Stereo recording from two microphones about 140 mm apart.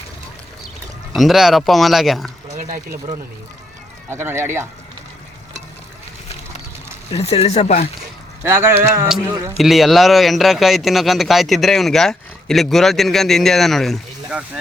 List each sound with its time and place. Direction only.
1.1 s speech: centre (ahead or behind)
2.6 s speech: 75° right (ahead or behind)
4.1 s speech: 15° right (ahead or behind)
7.1 s speech: 45° left (ahead or behind)
8.4 s speech: 15° right (ahead or behind)
9.0 s speech: 5° right (ahead or behind)